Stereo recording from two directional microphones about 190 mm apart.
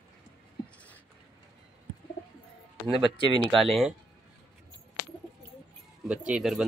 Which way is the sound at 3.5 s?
Centre (ahead or behind).